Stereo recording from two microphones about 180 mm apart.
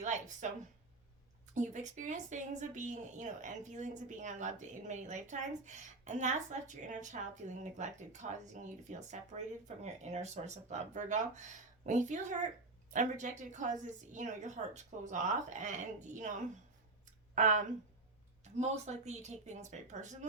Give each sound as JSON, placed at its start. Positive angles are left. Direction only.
{"t": 0.0, "sound": "a sound", "side_deg": -45}
{"t": 1.5, "sound": "a woman's voice", "side_deg": -40}
{"t": 17.3, "sound": "a woman's voice", "side_deg": -45}